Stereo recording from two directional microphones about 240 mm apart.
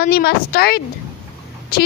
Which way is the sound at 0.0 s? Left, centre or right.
Left.